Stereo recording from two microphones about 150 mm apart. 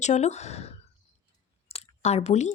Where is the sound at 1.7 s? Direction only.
45° left (ahead or behind).